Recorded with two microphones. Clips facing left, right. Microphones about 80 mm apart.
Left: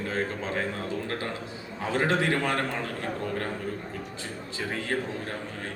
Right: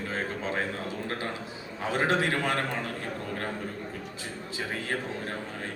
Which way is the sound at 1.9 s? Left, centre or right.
Right.